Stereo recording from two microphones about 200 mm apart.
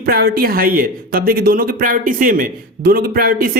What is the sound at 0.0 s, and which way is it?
Speech, 50° right (ahead or behind).